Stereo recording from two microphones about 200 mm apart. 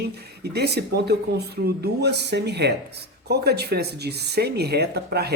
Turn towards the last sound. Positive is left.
turn(degrees=-55)  # may be behind; listen again after turning